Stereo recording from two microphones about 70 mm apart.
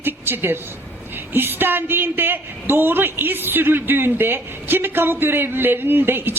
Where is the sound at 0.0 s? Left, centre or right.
Right.